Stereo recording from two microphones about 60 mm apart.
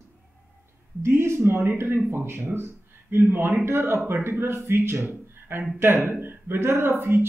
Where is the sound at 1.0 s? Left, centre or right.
Right.